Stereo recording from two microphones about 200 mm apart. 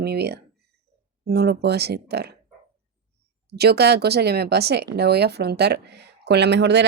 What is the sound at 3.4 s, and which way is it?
Speech, 55° right (ahead or behind).